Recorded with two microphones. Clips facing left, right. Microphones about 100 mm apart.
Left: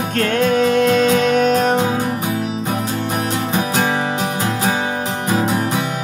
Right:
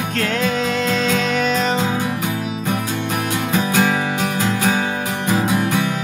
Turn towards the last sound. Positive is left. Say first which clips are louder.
# even
turn(degrees=20)  # may be behind; listen again after turning